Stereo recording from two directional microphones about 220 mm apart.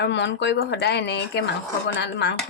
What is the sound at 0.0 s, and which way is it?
Speech, 50° left (ahead or behind).